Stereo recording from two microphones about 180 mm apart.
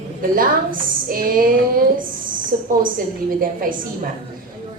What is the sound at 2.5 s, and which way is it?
A woman's voice, 55° right (ahead or behind).